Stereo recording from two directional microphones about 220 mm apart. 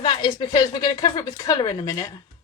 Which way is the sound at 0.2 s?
20° left (ahead or behind).